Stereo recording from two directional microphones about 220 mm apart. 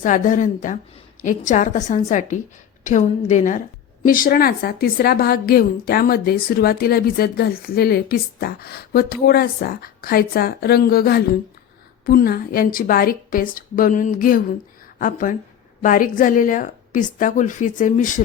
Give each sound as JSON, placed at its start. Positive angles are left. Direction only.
{"t": 0.0, "sound": "a woman's voice", "side_deg": 35}